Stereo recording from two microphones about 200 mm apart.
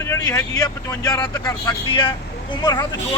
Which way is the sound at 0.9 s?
20° left (ahead or behind).